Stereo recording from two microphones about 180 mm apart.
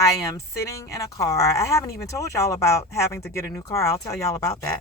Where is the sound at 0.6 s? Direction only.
15° left (ahead or behind).